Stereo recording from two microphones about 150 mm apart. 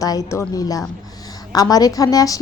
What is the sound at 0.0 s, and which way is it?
A woman's voice, 25° left (ahead or behind).